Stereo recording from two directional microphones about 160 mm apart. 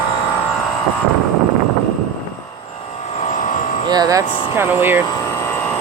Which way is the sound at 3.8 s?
25° right (ahead or behind).